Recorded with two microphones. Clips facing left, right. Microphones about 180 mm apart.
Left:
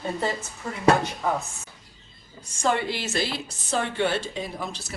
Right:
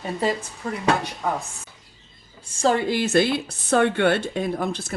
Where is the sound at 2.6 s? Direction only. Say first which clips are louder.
Right 5 dB; 40° right (ahead or behind).